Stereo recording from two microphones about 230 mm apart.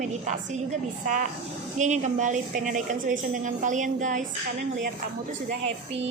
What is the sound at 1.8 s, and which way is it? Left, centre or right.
A woman's voice, right.